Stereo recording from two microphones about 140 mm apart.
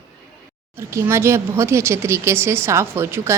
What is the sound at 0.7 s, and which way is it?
Speech, 20° right (ahead or behind).